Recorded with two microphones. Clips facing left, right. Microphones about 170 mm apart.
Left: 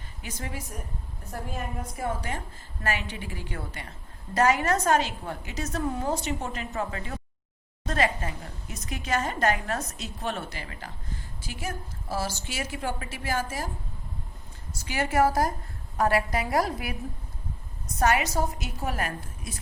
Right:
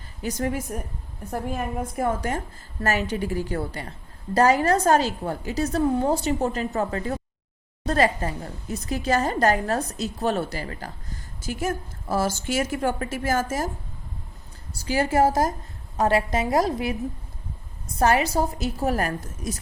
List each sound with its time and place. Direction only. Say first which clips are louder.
0.2 s a woman's voice: right 11 dB; 40° right (ahead or behind)
2.0 s a woman's voice: right 6 dB; 50° right (ahead or behind)
14.8 s a woman's voice: right 4 dB; 30° right (ahead or behind)
18.0 s a woman's voice: right 4 dB; 35° right (ahead or behind)